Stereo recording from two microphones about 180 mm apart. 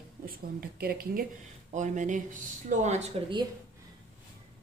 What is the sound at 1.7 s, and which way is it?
Speech, 45° right (ahead or behind).